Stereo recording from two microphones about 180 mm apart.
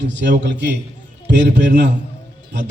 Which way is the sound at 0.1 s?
75° right (ahead or behind).